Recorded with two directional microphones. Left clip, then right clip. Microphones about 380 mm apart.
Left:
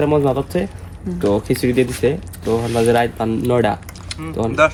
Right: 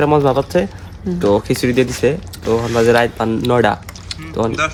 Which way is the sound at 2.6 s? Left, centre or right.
Centre.